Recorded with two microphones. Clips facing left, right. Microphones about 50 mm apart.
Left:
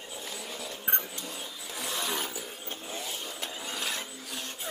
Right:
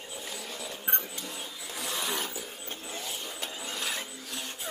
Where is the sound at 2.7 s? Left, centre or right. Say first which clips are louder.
Left 2 dB; centre.